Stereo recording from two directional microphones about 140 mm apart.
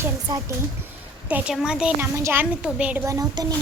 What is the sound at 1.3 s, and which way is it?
Speech, 5° right (ahead or behind).